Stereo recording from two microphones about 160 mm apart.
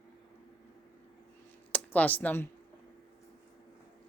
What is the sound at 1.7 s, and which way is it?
Speech, 10° left (ahead or behind).